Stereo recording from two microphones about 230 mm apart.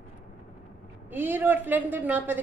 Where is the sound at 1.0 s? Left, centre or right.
Centre.